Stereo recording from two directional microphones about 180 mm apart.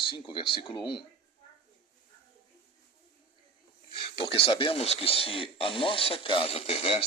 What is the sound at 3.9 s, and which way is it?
Speech, 30° left (ahead or behind).